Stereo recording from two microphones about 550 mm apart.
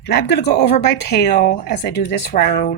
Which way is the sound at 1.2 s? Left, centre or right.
Centre.